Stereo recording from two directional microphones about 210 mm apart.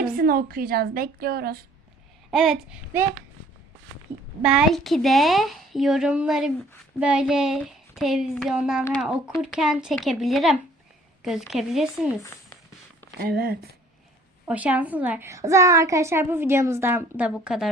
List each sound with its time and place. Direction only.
0.0 s a woman's voice: 45° right (ahead or behind)
2.3 s a woman's voice: centre (ahead or behind)
4.4 s a woman's voice: centre (ahead or behind)
13.1 s a woman's voice: 45° right (ahead or behind)
14.4 s a child's voice: 5° right (ahead or behind)